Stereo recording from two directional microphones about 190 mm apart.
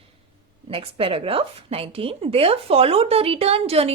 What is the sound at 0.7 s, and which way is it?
A woman's voice, 30° right (ahead or behind).